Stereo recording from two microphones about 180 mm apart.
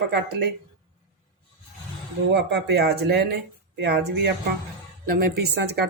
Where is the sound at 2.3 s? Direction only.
75° right (ahead or behind).